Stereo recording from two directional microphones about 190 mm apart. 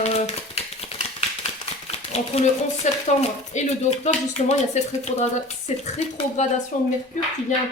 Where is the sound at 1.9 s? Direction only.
35° left (ahead or behind).